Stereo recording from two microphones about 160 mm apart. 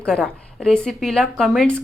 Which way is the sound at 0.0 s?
5° left (ahead or behind).